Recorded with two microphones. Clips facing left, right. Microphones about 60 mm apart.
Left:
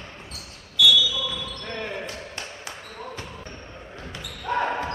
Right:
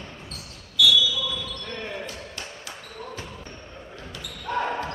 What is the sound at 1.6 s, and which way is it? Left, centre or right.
Basketball bounce, centre.